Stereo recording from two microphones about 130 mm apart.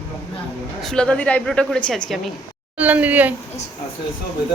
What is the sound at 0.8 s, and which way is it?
Speech, 5° left (ahead or behind).